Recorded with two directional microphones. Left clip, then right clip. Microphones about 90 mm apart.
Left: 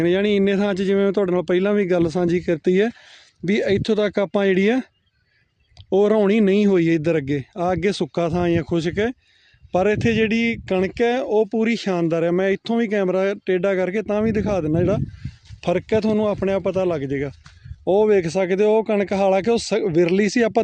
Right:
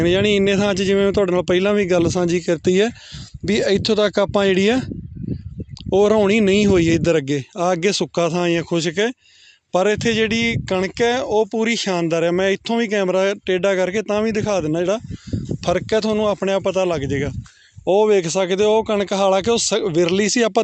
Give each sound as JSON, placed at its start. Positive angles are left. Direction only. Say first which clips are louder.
{"t": 0.0, "sound": "a man's voice", "louder": "right 2 dB", "side_deg": 25}
{"t": 5.9, "sound": "a man's voice", "louder": "right 2 dB", "side_deg": 30}
{"t": 9.7, "sound": "speech", "louder": "right 1 dB", "side_deg": 55}
{"t": 15.6, "sound": "speech", "louder": "right 1 dB", "side_deg": 60}
{"t": 16.2, "sound": "a man's voice", "louder": "right 2 dB", "side_deg": 35}
{"t": 17.8, "sound": "speech", "louder": "right 2 dB", "side_deg": 45}